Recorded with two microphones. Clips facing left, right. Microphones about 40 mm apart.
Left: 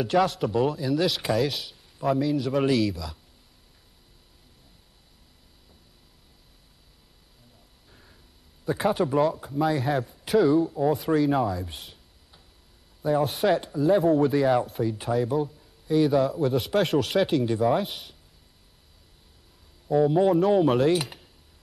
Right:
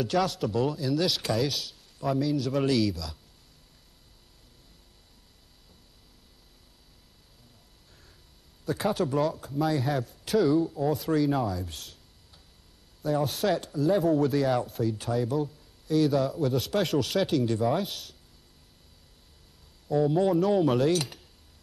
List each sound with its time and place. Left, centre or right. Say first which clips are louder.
0.0 s a man's voice: left 4 dB; centre
7.9 s a sound: left 4 dB; centre
8.9 s a man's voice: left 4 dB; centre
13.2 s a man's voice: left 4 dB; centre
19.9 s a man's voice: left 3 dB; centre